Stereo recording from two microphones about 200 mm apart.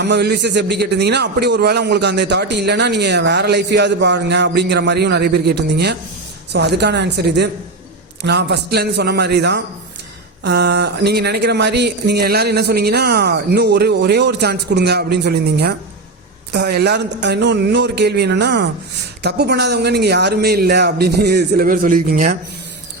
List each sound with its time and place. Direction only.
0.0 s a man's voice: 55° right (ahead or behind)